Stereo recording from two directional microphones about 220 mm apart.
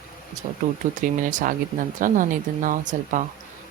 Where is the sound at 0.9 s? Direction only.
35° right (ahead or behind).